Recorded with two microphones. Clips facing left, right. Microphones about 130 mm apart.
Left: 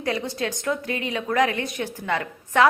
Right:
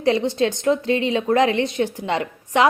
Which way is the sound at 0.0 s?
25° right (ahead or behind).